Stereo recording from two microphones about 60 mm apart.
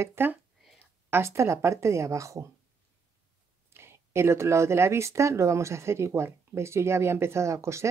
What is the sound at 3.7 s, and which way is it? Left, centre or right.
A woman's voice, right.